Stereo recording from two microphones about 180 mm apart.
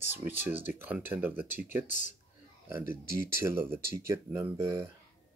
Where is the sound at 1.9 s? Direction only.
45° left (ahead or behind).